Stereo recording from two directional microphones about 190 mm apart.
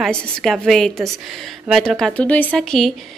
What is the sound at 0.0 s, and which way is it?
A woman's voice, centre (ahead or behind).